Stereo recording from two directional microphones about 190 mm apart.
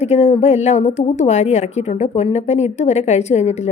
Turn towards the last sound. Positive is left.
turn(degrees=35)  # may be behind; listen again after turning